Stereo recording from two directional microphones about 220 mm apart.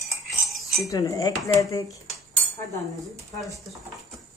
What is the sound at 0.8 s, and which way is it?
Speech, 15° left (ahead or behind).